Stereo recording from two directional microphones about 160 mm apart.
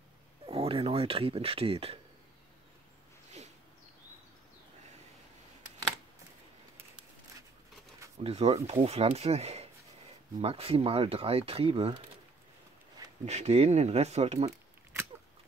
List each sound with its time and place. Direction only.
0.5 s speech: 35° right (ahead or behind)
8.2 s speech: 40° right (ahead or behind)
13.2 s speech: 45° right (ahead or behind)